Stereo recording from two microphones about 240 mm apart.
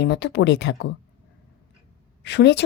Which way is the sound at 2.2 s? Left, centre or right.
Left.